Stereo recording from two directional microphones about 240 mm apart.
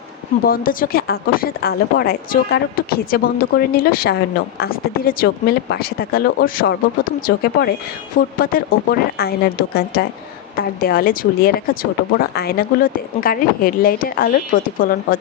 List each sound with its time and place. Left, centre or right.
0.4 s speech: left